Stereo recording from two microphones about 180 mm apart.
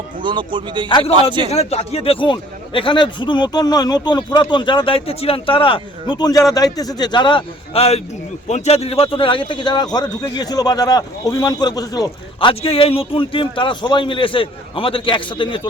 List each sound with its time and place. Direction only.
0.2 s a man's voice: 25° right (ahead or behind)
0.9 s a man's voice: 25° left (ahead or behind)